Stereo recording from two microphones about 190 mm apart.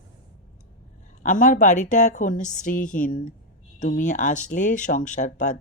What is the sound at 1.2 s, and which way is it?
Speech, 40° left (ahead or behind).